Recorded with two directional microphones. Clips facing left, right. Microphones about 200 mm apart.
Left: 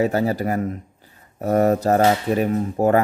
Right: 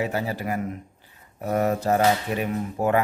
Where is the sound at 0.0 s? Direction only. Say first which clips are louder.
Left 7 dB; 45° left (ahead or behind).